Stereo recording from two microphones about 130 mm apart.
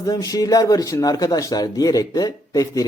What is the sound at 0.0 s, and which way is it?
Speech, 30° left (ahead or behind).